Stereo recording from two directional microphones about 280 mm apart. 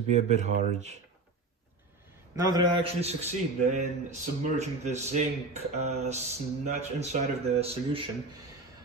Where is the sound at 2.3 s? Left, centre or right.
Centre.